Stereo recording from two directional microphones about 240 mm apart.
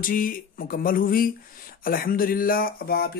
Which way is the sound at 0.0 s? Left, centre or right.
Left.